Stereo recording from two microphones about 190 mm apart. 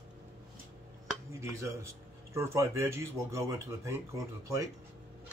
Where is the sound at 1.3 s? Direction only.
15° right (ahead or behind).